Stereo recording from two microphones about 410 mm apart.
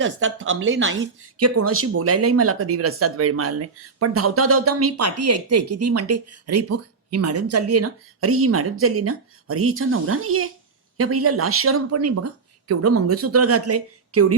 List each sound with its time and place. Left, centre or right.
0.0 s speech: right